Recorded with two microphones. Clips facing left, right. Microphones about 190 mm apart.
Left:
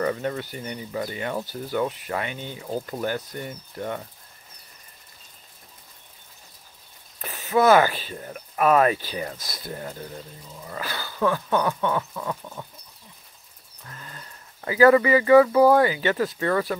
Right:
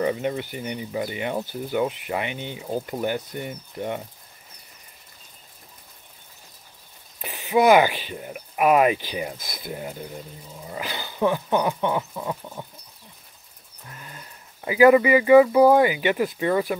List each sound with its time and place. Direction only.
0.0 s speech: 15° right (ahead or behind)
7.2 s speech: 15° right (ahead or behind)
13.8 s speech: 15° right (ahead or behind)